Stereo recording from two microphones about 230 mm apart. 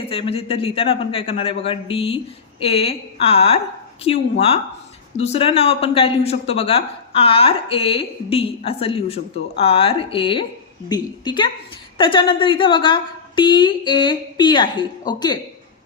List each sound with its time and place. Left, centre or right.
0.1 s speech: left